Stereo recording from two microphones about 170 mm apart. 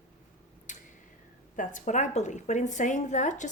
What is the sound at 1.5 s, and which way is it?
A woman's voice, 50° left (ahead or behind).